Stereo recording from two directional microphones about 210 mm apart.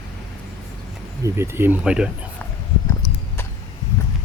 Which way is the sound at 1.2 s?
10° right (ahead or behind).